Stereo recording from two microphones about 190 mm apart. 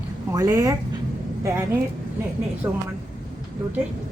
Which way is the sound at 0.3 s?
15° right (ahead or behind).